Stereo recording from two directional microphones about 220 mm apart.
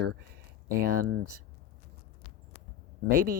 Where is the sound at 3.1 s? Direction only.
40° right (ahead or behind).